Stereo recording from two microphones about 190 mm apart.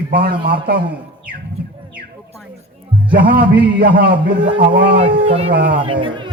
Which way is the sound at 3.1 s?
45° right (ahead or behind).